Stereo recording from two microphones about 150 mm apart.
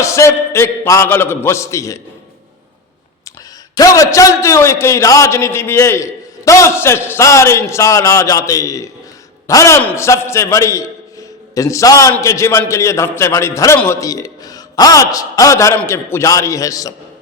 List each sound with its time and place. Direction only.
0.0 s a man's voice: 20° left (ahead or behind)
3.8 s a man's voice: 20° left (ahead or behind)